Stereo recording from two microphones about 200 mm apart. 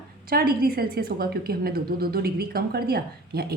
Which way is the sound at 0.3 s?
50° right (ahead or behind).